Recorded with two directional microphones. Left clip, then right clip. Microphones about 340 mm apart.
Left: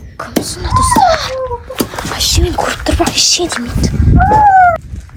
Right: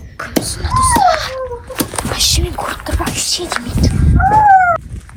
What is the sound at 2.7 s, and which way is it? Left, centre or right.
Speech, left.